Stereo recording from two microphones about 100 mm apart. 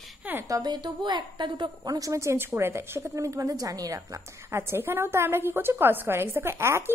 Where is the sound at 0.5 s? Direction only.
40° right (ahead or behind).